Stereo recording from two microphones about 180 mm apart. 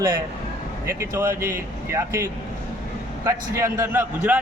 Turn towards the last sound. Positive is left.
turn(degrees=-10)  # may be behind; listen again after turning